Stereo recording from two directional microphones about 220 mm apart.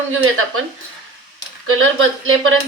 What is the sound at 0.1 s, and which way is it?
Speech, 75° right (ahead or behind).